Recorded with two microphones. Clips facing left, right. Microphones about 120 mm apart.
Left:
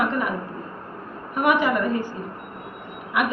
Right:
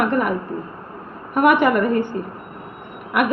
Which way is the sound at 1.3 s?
60° right (ahead or behind).